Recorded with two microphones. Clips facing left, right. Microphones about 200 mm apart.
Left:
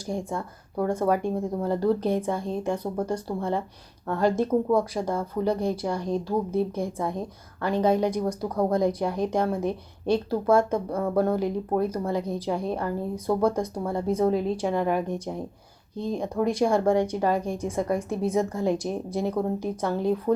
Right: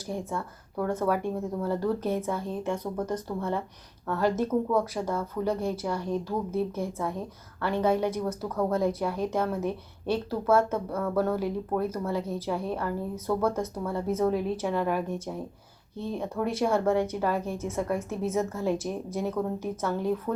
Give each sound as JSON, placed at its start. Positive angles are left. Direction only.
{"t": 0.0, "sound": "a woman's voice", "side_deg": 15}
{"t": 20.3, "sound": "speech", "side_deg": 25}